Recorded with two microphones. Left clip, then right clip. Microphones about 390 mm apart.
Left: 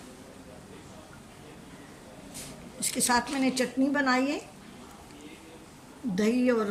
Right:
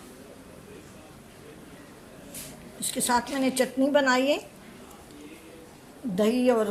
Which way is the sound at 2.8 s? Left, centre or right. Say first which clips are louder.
Right 1 dB; centre.